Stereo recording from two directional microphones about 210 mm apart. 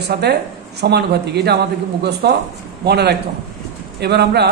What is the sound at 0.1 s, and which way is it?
Speech, 50° right (ahead or behind).